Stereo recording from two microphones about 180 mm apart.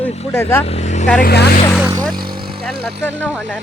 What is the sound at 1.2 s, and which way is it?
Speech, 65° left (ahead or behind).